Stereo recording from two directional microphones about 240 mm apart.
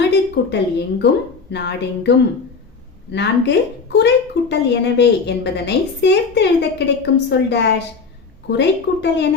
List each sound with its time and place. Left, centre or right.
0.1 s a woman's voice: left